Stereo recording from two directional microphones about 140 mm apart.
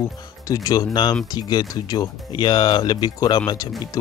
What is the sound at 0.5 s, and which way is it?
Speech, 25° left (ahead or behind).